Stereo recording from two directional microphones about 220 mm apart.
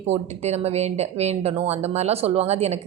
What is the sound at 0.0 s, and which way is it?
Speech, 30° right (ahead or behind).